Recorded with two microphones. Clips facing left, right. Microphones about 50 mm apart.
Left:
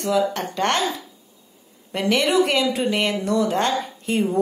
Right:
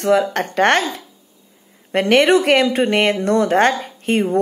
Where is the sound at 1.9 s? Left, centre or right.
Right.